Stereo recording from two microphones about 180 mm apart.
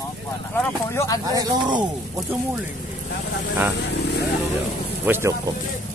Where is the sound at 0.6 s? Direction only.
15° left (ahead or behind).